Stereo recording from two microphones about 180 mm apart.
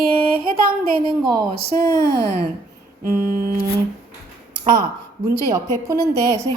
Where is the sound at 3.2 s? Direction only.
55° right (ahead or behind).